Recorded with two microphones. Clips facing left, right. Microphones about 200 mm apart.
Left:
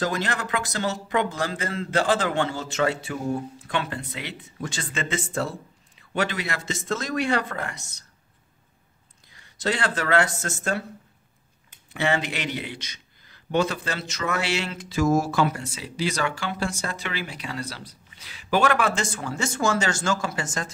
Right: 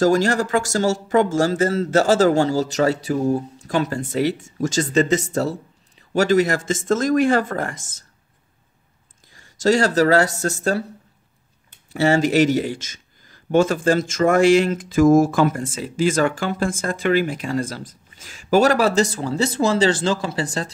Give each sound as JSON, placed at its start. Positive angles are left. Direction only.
{"t": 0.0, "sound": "speech", "side_deg": -45}
{"t": 9.3, "sound": "speech", "side_deg": -45}
{"t": 11.9, "sound": "speech", "side_deg": -40}